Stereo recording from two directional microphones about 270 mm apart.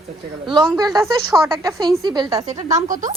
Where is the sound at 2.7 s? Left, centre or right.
Right.